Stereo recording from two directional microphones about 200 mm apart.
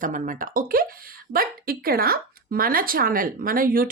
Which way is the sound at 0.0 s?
45° right (ahead or behind).